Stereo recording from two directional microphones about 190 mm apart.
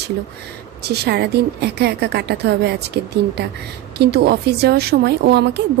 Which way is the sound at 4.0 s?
60° right (ahead or behind).